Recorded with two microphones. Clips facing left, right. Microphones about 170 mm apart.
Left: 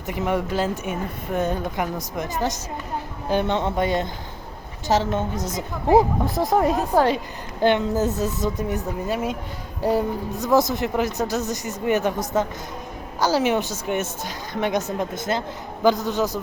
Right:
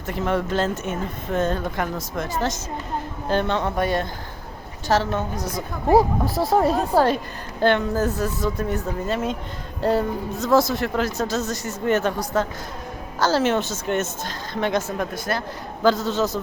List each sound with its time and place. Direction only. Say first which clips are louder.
0.1 s a woman's voice: right 1 dB; 15° left (ahead or behind)
7.6 s a woman's voice: even; 15° left (ahead or behind)